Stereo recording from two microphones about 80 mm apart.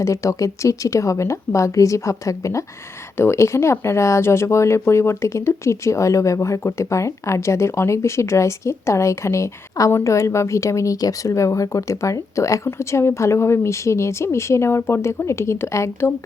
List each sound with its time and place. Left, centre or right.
0.0 s speech: left